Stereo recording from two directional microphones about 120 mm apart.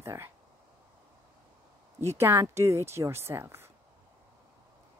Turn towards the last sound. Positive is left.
turn(degrees=-20)  # may be behind; listen again after turning